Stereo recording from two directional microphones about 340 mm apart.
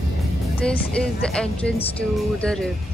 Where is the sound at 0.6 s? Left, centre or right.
Centre.